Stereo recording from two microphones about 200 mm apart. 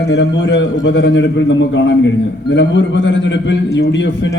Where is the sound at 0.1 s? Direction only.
60° left (ahead or behind).